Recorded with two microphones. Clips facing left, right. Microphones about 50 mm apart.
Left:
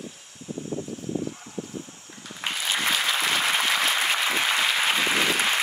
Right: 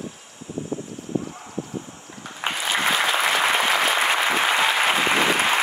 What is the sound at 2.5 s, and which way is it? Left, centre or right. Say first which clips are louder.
Applause: right 4 dB; right.